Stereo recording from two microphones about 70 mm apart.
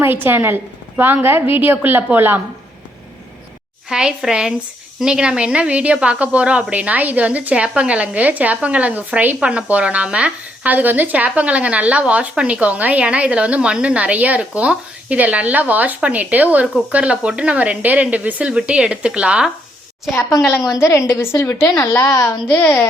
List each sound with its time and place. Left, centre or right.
0.0 s a woman's voice: right
3.8 s a woman's voice: centre
20.1 s a woman's voice: left
21.9 s a woman's voice: left